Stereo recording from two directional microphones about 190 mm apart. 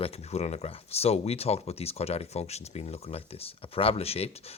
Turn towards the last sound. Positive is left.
turn(degrees=30)  # may be behind; listen again after turning